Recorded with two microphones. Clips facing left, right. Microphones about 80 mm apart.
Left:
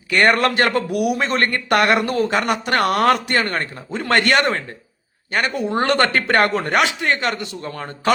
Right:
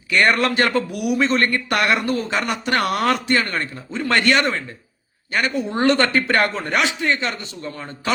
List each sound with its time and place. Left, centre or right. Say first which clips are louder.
0.1 s a man's voice: left 2 dB; left